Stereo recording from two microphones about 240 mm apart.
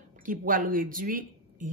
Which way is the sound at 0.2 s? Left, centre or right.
Right.